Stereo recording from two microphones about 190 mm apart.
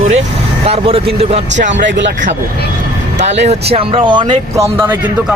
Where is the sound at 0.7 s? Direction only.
30° right (ahead or behind).